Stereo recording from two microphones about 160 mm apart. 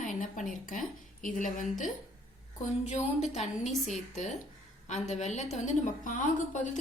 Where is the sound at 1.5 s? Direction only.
55° left (ahead or behind).